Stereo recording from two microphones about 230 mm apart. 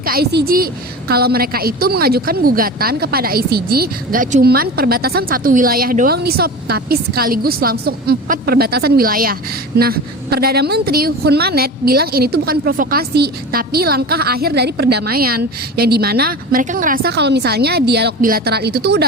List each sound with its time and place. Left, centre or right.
0.0 s a woman's voice: right